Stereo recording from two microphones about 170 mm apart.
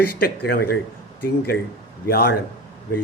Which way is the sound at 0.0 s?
65° left (ahead or behind).